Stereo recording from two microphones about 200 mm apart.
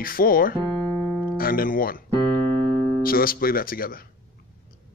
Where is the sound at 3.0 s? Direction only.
45° left (ahead or behind).